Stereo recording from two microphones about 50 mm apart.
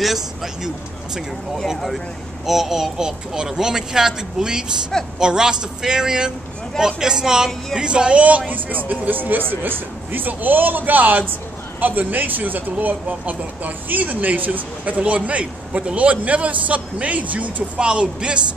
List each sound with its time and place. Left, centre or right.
0.0 s speech: centre
2.4 s speech: centre; by 17.6 s right
17.7 s speech: right